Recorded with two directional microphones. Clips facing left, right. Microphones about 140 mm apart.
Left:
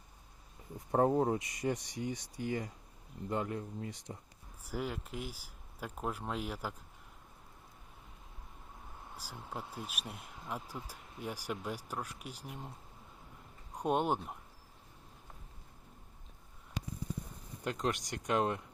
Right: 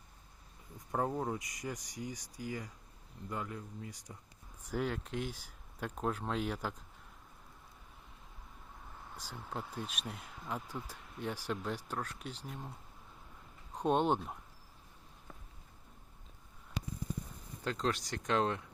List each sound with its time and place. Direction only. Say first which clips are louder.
0.9 s speech: left 6 dB; 30° left (ahead or behind)
4.6 s speech: right 2 dB; 5° left (ahead or behind)
9.1 s speech: right 1 dB; 10° left (ahead or behind)
13.7 s speech: right 1 dB; 10° left (ahead or behind)
17.6 s speech: even; 15° left (ahead or behind)